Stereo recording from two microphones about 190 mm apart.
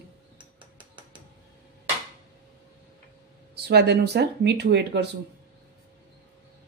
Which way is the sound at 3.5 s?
60° right (ahead or behind).